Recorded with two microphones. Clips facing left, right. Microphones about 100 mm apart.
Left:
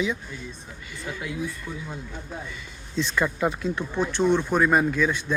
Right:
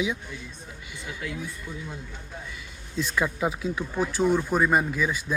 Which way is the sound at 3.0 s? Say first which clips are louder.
Left 2 dB; 5° right (ahead or behind).